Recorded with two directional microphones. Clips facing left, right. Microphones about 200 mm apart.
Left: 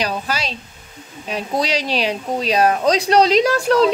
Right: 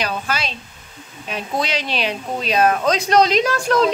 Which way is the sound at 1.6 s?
35° left (ahead or behind).